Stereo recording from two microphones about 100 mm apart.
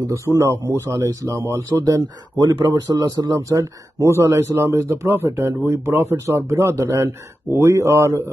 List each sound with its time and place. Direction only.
0.0 s a man's voice: 35° right (ahead or behind)